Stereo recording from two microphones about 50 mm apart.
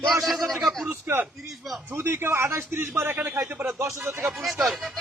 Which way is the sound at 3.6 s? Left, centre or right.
Right.